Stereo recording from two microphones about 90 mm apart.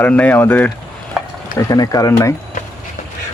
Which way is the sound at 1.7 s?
45° left (ahead or behind).